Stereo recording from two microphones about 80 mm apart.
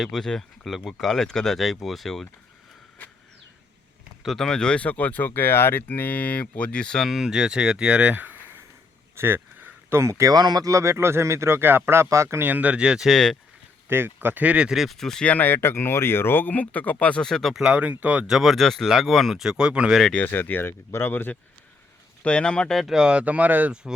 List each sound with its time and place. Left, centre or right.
0.0 s speech: centre
3.0 s vehicle: left
4.2 s speech: centre; by 8.4 s right
9.1 s a sound: right
10.3 s speech: right
12.4 s speech: right
13.1 s speech: centre
13.8 s speech: right
14.8 s speech: centre
15.3 s speech: left; by 17.5 s centre
17.5 s speech: centre
20.2 s speech: left
22.2 s speech: centre
22.8 s speech: centre